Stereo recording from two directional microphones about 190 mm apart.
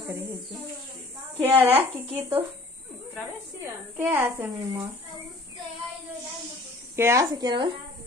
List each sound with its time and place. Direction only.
1.4 s a woman's voice: 10° right (ahead or behind)
1.7 s speech: 30° right (ahead or behind)
2.1 s a woman's voice: 10° right (ahead or behind)
3.9 s a woman's voice: 5° right (ahead or behind)
7.0 s speech: 15° right (ahead or behind)